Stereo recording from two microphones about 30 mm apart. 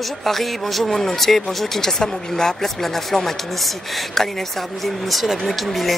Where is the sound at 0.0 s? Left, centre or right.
Centre.